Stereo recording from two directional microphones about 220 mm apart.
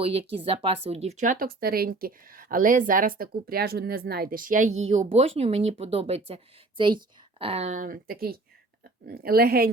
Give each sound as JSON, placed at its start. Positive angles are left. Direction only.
{"t": 0.0, "sound": "a woman's voice", "side_deg": -25}